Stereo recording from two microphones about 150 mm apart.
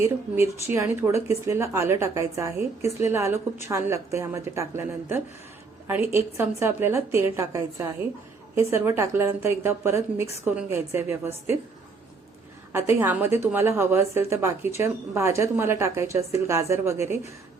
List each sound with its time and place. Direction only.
0.0 s a woman's voice: 20° right (ahead or behind)
12.7 s a woman's voice: 15° right (ahead or behind)